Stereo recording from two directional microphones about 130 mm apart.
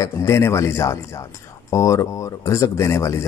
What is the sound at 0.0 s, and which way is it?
Speech, 20° left (ahead or behind).